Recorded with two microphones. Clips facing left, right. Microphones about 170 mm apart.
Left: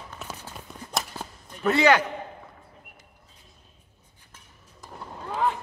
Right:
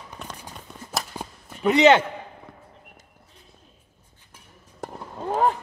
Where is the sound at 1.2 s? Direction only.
15° right (ahead or behind).